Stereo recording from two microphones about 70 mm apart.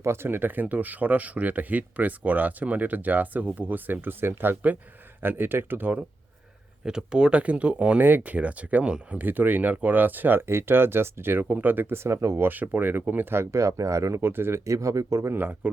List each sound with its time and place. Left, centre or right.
0.0 s speech: right
6.8 s speech: centre; by 12.4 s right
12.4 s speech: right
13.4 s speech: right
14.6 s speech: right
15.3 s speech: right